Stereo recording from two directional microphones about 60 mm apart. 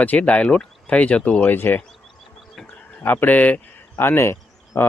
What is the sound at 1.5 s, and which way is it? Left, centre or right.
Speech, left.